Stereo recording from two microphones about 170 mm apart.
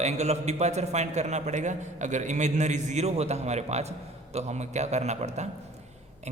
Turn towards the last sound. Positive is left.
turn(degrees=-40)  # may be behind; listen again after turning